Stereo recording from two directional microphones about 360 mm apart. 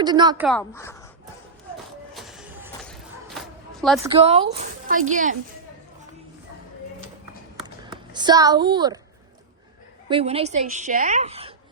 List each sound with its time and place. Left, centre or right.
0.0 s a woman's voice: centre
0.4 s speech: centre
2.1 s a sound: centre
4.2 s a woman's voice: centre
7.6 s a sound: centre
10.1 s a woman's voice: centre